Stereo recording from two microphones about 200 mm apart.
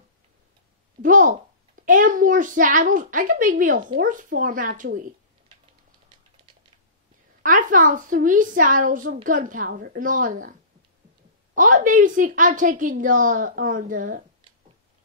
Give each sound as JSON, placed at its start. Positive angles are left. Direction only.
{"t": 1.0, "sound": "a woman's voice", "side_deg": -40}
{"t": 7.4, "sound": "a woman's voice", "side_deg": -40}
{"t": 11.5, "sound": "a woman's voice", "side_deg": -40}